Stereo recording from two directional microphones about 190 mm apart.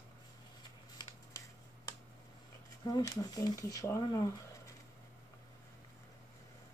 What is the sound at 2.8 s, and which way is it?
Speech, 20° left (ahead or behind).